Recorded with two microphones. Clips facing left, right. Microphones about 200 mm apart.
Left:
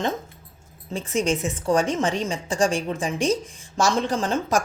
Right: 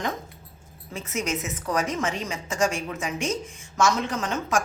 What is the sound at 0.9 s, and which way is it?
Speech, 30° left (ahead or behind).